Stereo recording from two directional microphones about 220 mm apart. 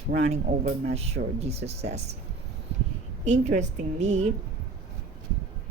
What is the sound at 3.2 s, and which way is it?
Speech, 30° right (ahead or behind).